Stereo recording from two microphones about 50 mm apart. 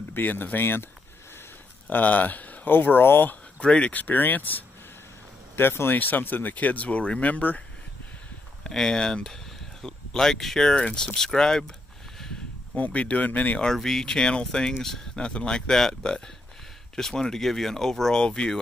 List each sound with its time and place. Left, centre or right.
0.1 s speech: left
1.9 s speech: left
3.6 s speech: left
4.0 s speech: left
5.9 s speech: left
8.6 s speech: centre
12.7 s speech: left
13.7 s speech: centre
18.2 s speech: centre